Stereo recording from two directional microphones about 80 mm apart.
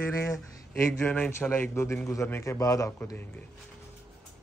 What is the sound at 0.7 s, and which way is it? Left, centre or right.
A man's voice, left.